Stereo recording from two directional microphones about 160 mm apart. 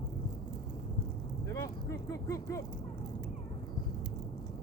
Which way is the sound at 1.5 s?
20° left (ahead or behind).